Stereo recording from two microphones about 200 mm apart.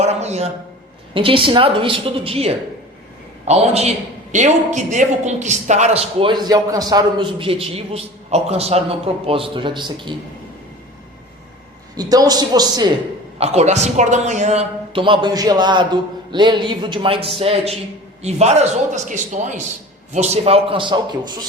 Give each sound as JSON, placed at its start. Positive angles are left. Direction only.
{"t": 0.0, "sound": "a sound", "side_deg": -35}
{"t": 1.1, "sound": "a man's voice", "side_deg": -25}
{"t": 11.9, "sound": "a man's voice", "side_deg": -20}
{"t": 13.4, "sound": "a man's voice", "side_deg": -30}